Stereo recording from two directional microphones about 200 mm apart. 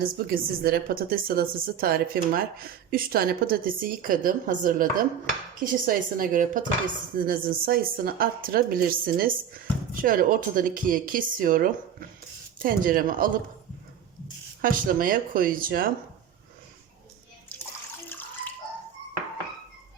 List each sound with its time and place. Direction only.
0.0 s a woman's voice: 50° right (ahead or behind)
14.6 s a woman's voice: 45° right (ahead or behind)